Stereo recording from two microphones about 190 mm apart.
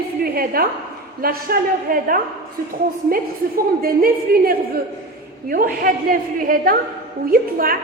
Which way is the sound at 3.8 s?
50° right (ahead or behind).